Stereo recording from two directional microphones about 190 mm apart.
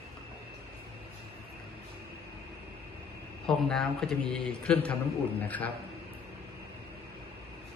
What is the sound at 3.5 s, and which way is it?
A man's voice, 5° left (ahead or behind).